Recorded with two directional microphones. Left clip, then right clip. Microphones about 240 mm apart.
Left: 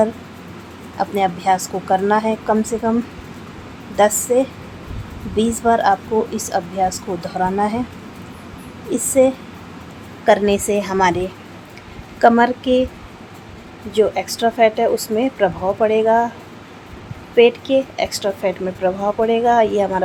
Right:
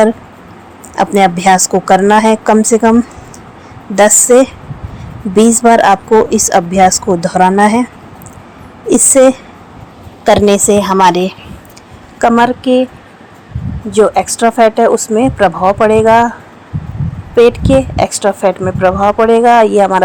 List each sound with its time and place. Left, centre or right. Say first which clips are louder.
0.9 s a woman's voice: right 9 dB; right
3.9 s a woman's voice: right 9 dB; right
8.9 s a woman's voice: right 8 dB; right; by 12.9 s centre
13.9 s a woman's voice: right 8 dB; centre
17.3 s a woman's voice: right 6 dB; centre